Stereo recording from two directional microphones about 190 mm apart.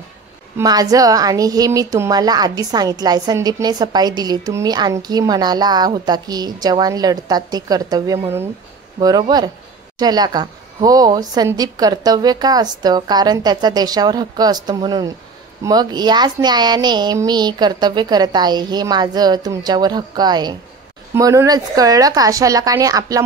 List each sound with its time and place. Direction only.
0.6 s a woman's voice: 20° right (ahead or behind)